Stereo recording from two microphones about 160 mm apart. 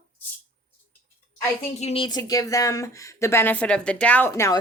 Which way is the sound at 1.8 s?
35° left (ahead or behind).